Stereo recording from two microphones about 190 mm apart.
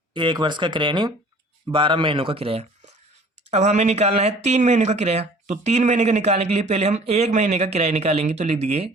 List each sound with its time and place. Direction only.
0.1 s a man's voice: 25° right (ahead or behind)